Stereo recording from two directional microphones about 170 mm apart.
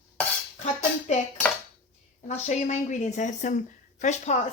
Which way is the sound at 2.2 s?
45° left (ahead or behind).